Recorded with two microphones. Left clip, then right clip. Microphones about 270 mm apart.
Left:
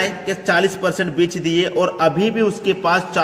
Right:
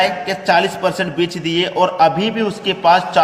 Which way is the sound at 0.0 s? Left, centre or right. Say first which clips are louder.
Right 4 dB; centre.